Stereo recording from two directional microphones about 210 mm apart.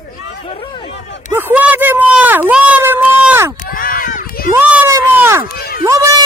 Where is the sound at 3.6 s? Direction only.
45° left (ahead or behind).